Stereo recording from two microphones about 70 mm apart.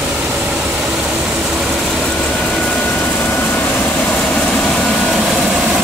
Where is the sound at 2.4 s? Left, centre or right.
Centre.